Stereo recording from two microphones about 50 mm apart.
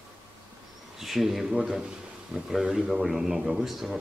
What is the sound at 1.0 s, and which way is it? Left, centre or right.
Speech, centre.